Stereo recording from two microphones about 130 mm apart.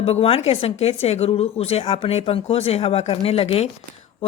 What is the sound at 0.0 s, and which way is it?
Speech, 50° left (ahead or behind).